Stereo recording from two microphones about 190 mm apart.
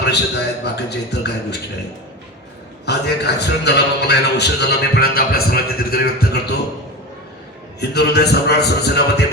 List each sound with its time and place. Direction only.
0.0 s a man's voice: 60° left (ahead or behind)
2.8 s a man's voice: 60° left (ahead or behind)
7.8 s a man's voice: 60° left (ahead or behind)